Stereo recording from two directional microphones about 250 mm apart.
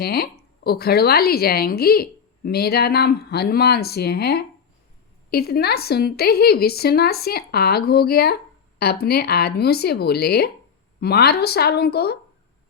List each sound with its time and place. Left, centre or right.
0.0 s a woman's voice: left